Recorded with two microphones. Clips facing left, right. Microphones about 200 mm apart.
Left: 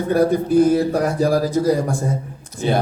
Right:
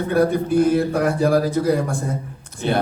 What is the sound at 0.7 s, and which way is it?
A man's voice, 55° right (ahead or behind).